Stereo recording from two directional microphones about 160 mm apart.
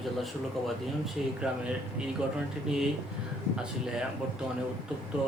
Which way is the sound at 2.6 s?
5° right (ahead or behind).